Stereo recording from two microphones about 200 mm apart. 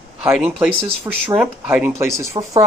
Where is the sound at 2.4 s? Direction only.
25° right (ahead or behind).